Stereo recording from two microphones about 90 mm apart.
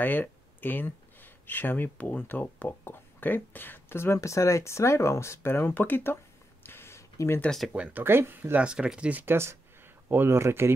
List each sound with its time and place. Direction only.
0.0 s speech: 20° left (ahead or behind)
6.6 s a sound: 25° left (ahead or behind)
7.4 s speech: 5° left (ahead or behind)
7.7 s speech: 10° right (ahead or behind)
8.0 s speech: 25° right (ahead or behind)
9.2 s speech: 25° right (ahead or behind)